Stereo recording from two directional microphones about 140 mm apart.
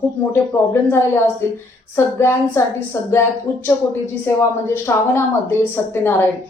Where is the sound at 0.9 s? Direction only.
20° left (ahead or behind).